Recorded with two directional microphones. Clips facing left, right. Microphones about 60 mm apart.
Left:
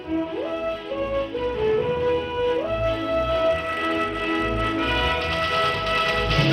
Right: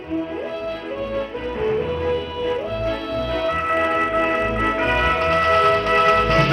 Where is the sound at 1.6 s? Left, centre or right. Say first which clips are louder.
Right 1 dB; right.